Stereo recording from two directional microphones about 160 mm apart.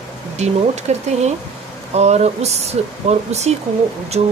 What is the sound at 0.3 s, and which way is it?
Speech, 45° right (ahead or behind).